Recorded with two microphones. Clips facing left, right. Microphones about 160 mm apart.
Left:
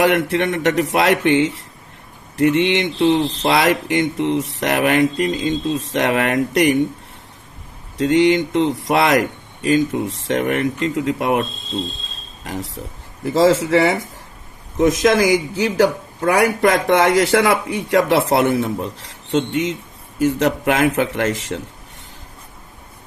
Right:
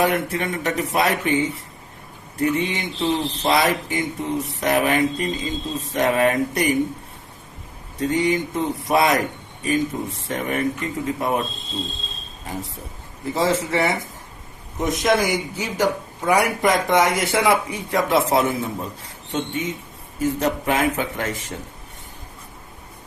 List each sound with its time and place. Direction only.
0.0 s speech: 80° left
7.9 s speech: 80° left
12.5 s a man's voice: 85° left